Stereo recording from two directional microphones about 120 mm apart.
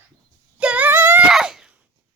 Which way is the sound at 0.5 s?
10° right (ahead or behind).